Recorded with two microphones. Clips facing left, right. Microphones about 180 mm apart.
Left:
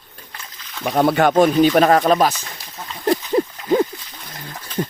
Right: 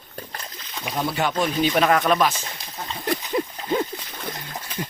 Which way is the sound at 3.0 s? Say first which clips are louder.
Left 7 dB; 35° left (ahead or behind).